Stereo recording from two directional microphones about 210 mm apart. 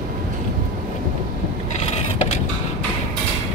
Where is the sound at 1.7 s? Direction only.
35° left (ahead or behind).